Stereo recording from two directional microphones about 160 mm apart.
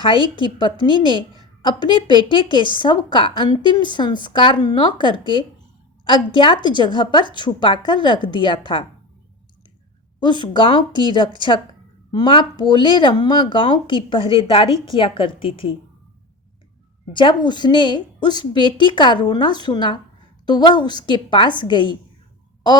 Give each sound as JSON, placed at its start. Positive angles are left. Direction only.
{"t": 0.0, "sound": "a woman's voice", "side_deg": 30}
{"t": 10.4, "sound": "a woman's voice", "side_deg": 30}
{"t": 17.1, "sound": "a woman's voice", "side_deg": 30}